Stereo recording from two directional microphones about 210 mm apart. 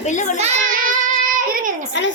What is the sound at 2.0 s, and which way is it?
Speech, 60° left (ahead or behind).